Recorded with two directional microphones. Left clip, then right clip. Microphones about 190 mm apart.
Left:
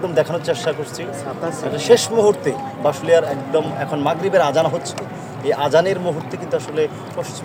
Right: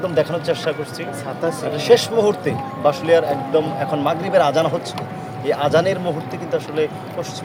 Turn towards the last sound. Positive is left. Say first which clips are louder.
# left 1 dB
turn(degrees=20)  # may be behind; listen again after turning